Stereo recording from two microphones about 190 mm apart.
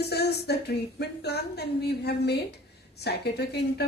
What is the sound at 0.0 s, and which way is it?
A woman's voice, 60° left (ahead or behind).